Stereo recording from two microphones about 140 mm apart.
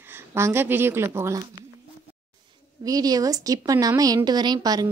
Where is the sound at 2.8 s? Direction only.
25° right (ahead or behind).